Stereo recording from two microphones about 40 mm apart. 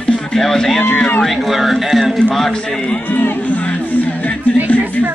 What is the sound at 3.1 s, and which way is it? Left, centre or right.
Music, left.